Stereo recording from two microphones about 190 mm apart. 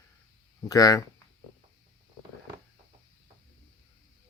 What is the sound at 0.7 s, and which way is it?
Speech, 20° left (ahead or behind).